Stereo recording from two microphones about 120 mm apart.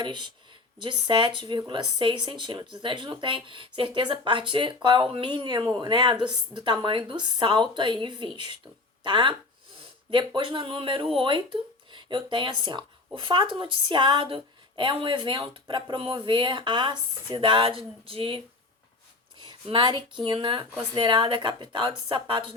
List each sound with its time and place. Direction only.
0.0 s a woman's voice: 40° right (ahead or behind)